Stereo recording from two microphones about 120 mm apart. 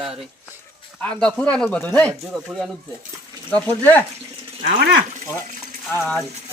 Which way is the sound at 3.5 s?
15° left (ahead or behind).